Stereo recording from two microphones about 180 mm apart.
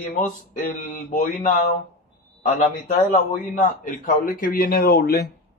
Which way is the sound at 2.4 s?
45° left (ahead or behind).